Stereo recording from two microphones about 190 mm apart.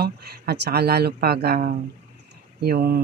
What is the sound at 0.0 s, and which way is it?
Speech, 55° right (ahead or behind).